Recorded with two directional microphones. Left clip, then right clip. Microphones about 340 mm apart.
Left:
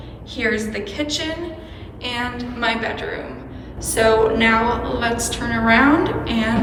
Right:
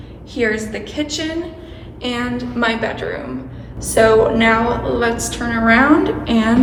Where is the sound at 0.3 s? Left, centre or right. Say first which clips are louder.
Right 2 dB; centre.